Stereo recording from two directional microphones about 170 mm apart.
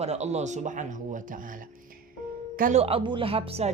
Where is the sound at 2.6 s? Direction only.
50° right (ahead or behind).